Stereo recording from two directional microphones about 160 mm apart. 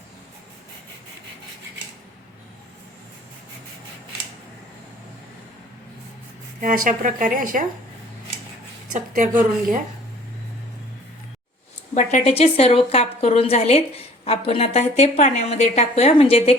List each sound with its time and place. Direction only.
6.6 s a woman's voice: 60° right (ahead or behind)
8.9 s a woman's voice: 55° right (ahead or behind)
11.9 s a woman's voice: 45° left (ahead or behind)